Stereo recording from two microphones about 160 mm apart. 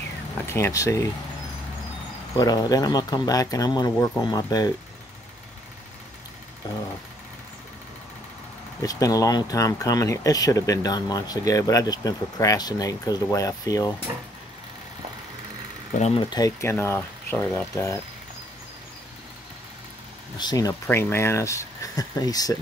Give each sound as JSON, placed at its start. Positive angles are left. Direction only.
{"t": 0.5, "sound": "speech", "side_deg": 20}
{"t": 2.3, "sound": "speech", "side_deg": 25}
{"t": 6.6, "sound": "speech", "side_deg": 25}
{"t": 8.8, "sound": "speech", "side_deg": 20}
{"t": 15.9, "sound": "speech", "side_deg": 45}
{"t": 16.2, "sound": "speech", "side_deg": 25}
{"t": 16.7, "sound": "speech", "side_deg": 15}
{"t": 20.3, "sound": "speech", "side_deg": 25}